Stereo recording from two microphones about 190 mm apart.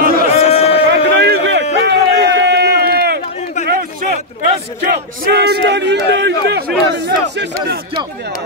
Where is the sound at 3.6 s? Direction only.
50° right (ahead or behind).